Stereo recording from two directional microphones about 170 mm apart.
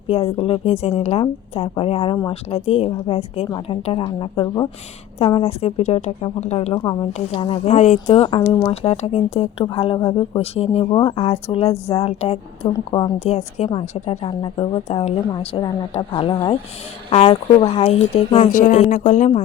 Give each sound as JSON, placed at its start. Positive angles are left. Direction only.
{"t": 0.1, "sound": "speech", "side_deg": 35}
{"t": 5.2, "sound": "speech", "side_deg": 35}
{"t": 8.1, "sound": "speech", "side_deg": 30}